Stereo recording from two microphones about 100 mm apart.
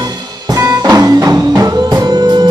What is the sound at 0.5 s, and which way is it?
Music, 40° right (ahead or behind).